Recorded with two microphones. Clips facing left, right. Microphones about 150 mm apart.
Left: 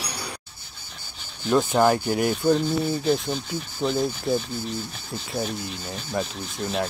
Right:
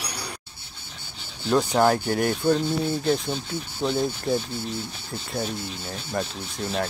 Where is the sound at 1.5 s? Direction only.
Centre (ahead or behind).